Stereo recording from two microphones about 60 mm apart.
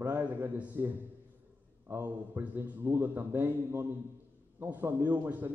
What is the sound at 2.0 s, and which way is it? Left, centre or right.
A man's voice, right.